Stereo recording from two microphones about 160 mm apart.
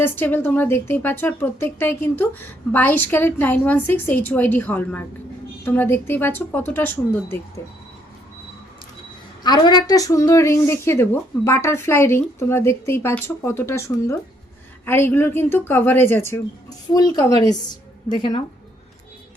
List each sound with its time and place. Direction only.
0.0 s a woman's voice: 10° left (ahead or behind)
9.4 s a woman's voice: 25° left (ahead or behind)